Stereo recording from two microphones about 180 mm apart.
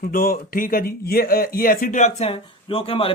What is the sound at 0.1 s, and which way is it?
Speech, 55° left (ahead or behind).